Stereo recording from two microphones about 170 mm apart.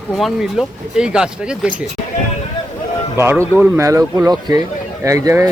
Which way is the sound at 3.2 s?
15° right (ahead or behind).